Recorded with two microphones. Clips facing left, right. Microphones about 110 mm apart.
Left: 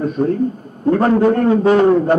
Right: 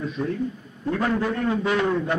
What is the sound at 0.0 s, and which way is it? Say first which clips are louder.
A man's voice: left 10 dB; 45° left (ahead or behind).